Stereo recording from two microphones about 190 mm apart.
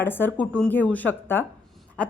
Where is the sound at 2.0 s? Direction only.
5° left (ahead or behind).